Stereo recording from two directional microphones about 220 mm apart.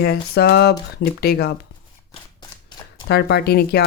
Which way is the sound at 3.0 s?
45° left (ahead or behind).